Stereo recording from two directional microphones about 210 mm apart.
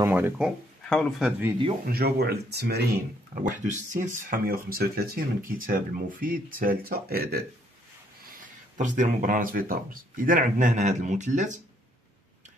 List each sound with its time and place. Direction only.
0.0 s speech: 10° right (ahead or behind)
0.8 s speech: centre (ahead or behind)
1.9 s speech: 45° right (ahead or behind)
3.4 s speech: 35° right (ahead or behind)
8.7 s speech: 35° right (ahead or behind)